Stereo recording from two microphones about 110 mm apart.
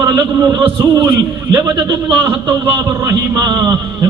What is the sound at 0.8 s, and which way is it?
Speech, 45° right (ahead or behind).